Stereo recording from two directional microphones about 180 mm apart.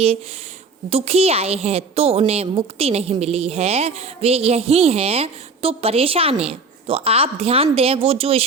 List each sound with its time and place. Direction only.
0.9 s a woman's voice: 35° right (ahead or behind)